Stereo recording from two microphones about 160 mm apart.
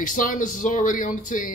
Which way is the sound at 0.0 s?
55° left (ahead or behind).